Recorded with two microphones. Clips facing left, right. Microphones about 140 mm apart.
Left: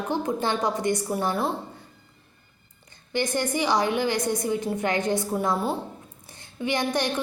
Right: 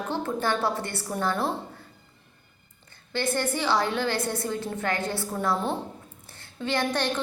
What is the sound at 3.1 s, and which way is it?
A woman's voice, 15° left (ahead or behind).